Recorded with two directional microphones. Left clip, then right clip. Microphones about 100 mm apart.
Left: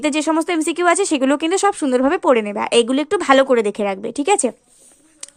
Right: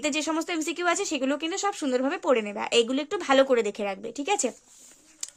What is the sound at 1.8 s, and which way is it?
A woman's voice, 40° left (ahead or behind).